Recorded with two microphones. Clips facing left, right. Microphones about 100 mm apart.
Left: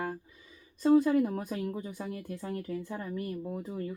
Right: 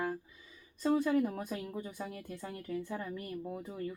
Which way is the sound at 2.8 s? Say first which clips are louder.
Left 3 dB; 25° left (ahead or behind).